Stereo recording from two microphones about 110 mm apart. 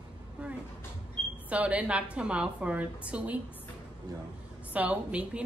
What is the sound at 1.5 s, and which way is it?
Speech, 10° right (ahead or behind).